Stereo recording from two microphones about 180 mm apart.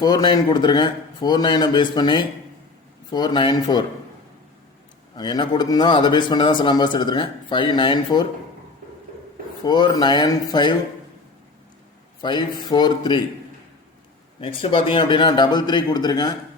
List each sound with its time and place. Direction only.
0.0 s a man's voice: 25° left (ahead or behind)
5.1 s a man's voice: 25° left (ahead or behind)
9.6 s a man's voice: 25° left (ahead or behind)
12.2 s a man's voice: 25° left (ahead or behind)
14.6 s a man's voice: 30° left (ahead or behind)